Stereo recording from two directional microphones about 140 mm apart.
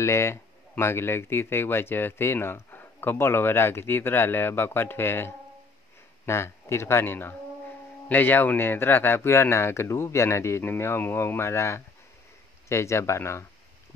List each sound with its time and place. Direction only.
0.0 s speech: 20° left (ahead or behind)